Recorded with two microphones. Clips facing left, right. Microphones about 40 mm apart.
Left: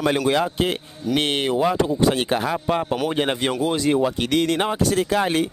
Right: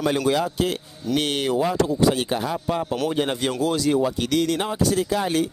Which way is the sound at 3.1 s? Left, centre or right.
Left.